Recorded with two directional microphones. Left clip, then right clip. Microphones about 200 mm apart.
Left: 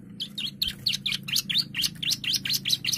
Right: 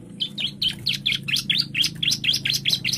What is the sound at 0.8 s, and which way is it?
Bird, 35° left (ahead or behind).